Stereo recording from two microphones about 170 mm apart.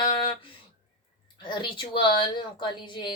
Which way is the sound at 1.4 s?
30° left (ahead or behind).